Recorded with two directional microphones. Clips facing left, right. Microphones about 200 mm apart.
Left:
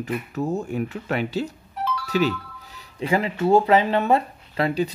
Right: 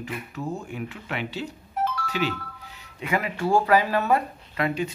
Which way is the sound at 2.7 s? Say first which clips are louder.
Left 5 dB; 30° left (ahead or behind).